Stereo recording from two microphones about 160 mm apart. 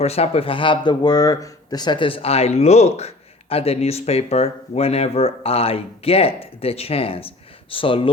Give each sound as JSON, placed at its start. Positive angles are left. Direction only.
{"t": 0.0, "sound": "speech", "side_deg": 40}